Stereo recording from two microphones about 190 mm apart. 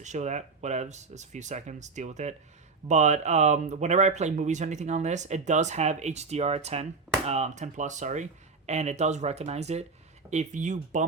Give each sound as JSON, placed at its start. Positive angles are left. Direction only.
{"t": 0.0, "sound": "speech", "side_deg": -40}